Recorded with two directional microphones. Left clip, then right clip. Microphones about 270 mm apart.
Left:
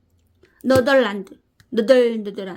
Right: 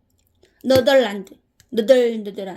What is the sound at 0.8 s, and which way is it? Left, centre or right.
A woman's voice, centre.